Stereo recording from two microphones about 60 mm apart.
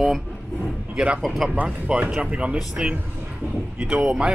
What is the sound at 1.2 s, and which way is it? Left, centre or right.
Speech, centre.